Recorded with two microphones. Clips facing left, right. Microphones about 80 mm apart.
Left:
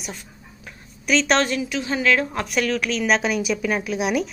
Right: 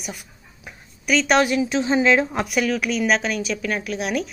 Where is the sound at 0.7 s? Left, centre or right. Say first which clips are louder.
Even; centre.